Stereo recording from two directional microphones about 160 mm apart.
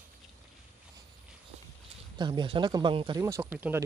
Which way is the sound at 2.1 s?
30° right (ahead or behind).